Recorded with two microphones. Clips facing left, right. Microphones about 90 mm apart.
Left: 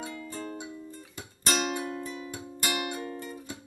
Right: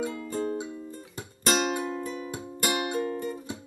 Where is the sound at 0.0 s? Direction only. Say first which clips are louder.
Right 7 dB; 30° right (ahead or behind).